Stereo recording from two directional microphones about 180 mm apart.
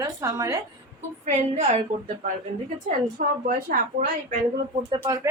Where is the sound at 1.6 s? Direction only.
35° right (ahead or behind).